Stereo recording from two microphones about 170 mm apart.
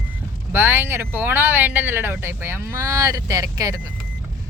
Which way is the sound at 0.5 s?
15° right (ahead or behind).